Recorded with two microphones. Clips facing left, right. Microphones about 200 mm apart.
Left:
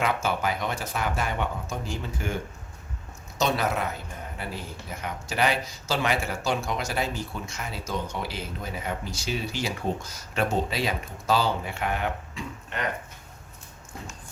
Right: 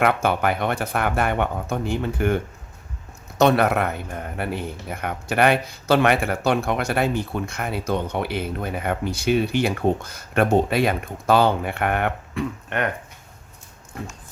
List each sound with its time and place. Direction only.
0.0 s speech: 60° right (ahead or behind)